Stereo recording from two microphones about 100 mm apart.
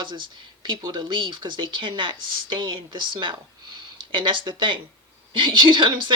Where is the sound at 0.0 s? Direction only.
50° right (ahead or behind).